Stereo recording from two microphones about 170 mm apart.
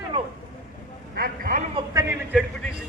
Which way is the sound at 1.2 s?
55° right (ahead or behind).